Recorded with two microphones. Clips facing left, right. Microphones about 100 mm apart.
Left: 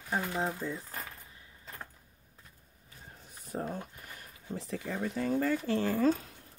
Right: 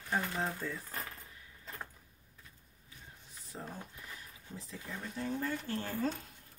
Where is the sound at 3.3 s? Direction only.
55° left (ahead or behind); by 6.1 s 90° left.